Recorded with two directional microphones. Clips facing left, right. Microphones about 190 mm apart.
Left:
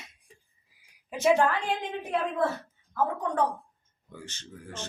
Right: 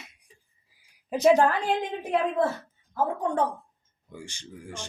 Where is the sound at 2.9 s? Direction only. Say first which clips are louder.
Right 2 dB; 25° right (ahead or behind).